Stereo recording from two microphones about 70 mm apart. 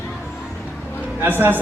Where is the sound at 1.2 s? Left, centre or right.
Right.